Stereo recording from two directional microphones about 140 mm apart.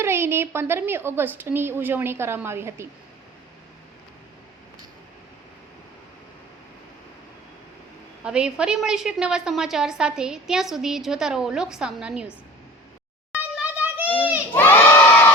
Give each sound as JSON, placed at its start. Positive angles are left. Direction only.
{"t": 0.0, "sound": "a woman's voice", "side_deg": -20}
{"t": 8.2, "sound": "a woman's voice", "side_deg": -5}
{"t": 13.3, "sound": "a sound", "side_deg": -10}
{"t": 14.5, "sound": "crowd", "side_deg": 15}